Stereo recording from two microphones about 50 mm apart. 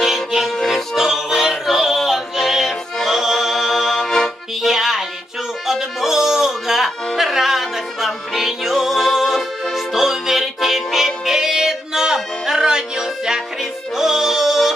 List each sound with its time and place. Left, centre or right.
0.0 s music: centre
0.6 s music: centre
0.9 s music: centre